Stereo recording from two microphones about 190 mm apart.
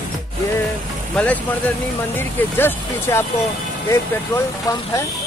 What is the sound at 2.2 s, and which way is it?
Speech, 10° left (ahead or behind).